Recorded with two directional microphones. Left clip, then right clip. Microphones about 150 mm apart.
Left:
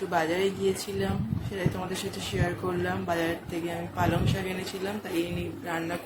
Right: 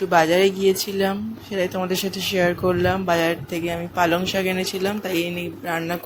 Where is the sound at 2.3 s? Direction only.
55° right (ahead or behind).